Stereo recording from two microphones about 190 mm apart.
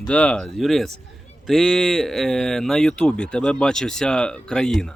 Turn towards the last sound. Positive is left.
turn(degrees=5)  # may be behind; listen again after turning